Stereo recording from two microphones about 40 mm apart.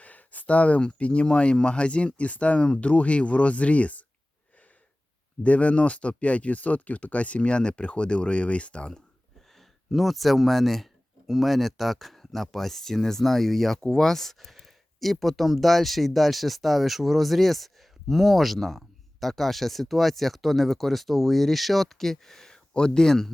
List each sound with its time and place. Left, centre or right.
0.0 s speech: left
5.4 s speech: left
9.6 s speech: centre